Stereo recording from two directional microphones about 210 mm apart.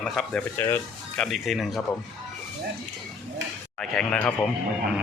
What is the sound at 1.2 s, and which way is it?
Speech, centre (ahead or behind).